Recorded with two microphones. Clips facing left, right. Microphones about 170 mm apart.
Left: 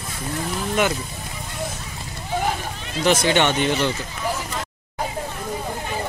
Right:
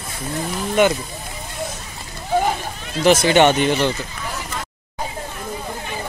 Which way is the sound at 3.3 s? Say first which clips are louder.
Right 5 dB; 35° right (ahead or behind).